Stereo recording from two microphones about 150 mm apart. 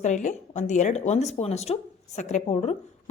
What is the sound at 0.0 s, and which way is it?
Speech, 55° left (ahead or behind).